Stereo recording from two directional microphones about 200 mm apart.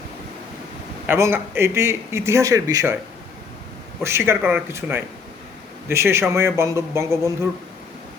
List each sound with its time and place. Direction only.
1.0 s a man's voice: 10° right (ahead or behind)
4.3 s a man's voice: 10° right (ahead or behind)